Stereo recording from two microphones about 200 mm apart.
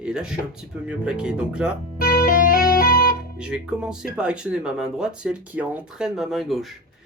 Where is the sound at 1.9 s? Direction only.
45° left (ahead or behind).